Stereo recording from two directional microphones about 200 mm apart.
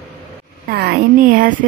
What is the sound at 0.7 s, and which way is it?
Speech, 55° right (ahead or behind).